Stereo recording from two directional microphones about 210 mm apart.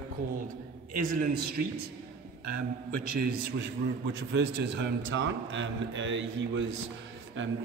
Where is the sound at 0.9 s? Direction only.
40° right (ahead or behind).